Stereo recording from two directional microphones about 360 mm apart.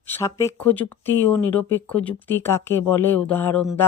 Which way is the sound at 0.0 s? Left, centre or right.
Centre.